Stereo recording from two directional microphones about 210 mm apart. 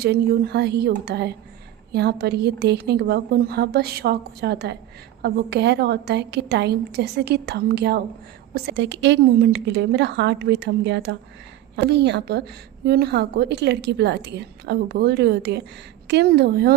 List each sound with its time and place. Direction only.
0.0 s a woman's voice: 50° right (ahead or behind)